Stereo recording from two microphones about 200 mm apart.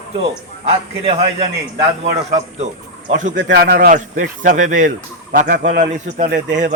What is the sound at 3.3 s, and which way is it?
Speech, 60° right (ahead or behind).